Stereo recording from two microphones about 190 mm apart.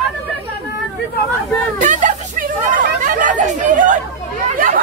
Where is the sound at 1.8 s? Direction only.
40° right (ahead or behind).